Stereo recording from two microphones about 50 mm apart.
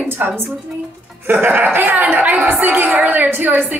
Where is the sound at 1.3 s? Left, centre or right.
Right.